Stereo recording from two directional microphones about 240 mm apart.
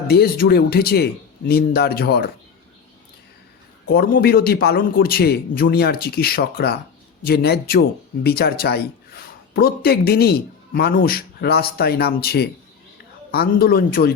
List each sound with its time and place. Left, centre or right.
0.1 s a man's voice: left
3.9 s a man's voice: left